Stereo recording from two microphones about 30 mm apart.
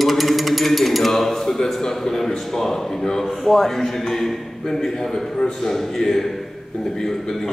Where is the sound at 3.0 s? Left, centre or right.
Centre.